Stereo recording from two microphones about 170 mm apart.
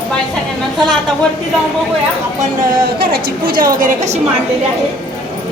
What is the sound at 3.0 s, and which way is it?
A woman's voice, 60° right (ahead or behind).